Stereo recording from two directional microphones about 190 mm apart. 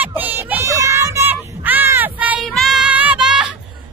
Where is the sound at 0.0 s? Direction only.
10° right (ahead or behind).